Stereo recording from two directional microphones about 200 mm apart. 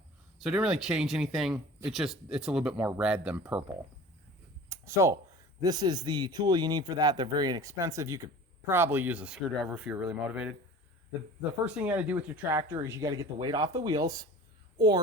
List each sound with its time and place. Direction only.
0.3 s speech: 5° right (ahead or behind)
4.7 s a sound: 15° right (ahead or behind)
5.6 s speech: 20° right (ahead or behind)
11.6 s speech: 10° right (ahead or behind)